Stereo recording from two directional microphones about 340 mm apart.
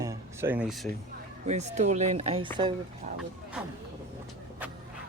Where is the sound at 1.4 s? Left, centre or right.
Centre.